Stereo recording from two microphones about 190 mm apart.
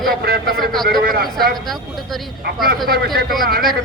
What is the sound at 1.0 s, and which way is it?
Speech, 50° right (ahead or behind).